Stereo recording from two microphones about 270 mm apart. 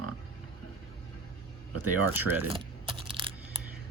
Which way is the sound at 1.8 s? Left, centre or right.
Centre.